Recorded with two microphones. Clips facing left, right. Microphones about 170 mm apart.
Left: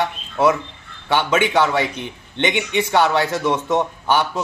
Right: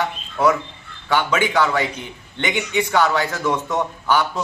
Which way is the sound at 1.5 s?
25° left (ahead or behind).